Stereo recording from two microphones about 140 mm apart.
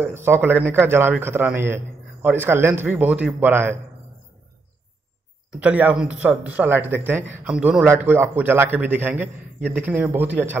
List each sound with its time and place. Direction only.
0.0 s speech: 15° right (ahead or behind)
5.5 s speech: 10° right (ahead or behind)